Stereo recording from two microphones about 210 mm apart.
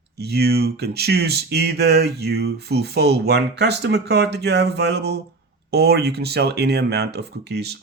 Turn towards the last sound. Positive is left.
turn(degrees=-50)  # may be behind; listen again after turning